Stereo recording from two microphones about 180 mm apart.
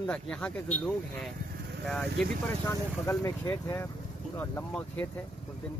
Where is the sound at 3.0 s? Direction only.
15° left (ahead or behind).